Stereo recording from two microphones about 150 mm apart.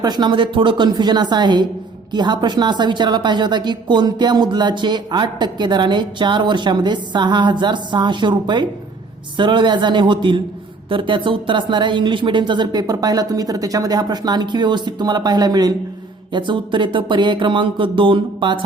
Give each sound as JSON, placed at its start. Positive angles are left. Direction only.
{"t": 0.0, "sound": "a woman's voice", "side_deg": -30}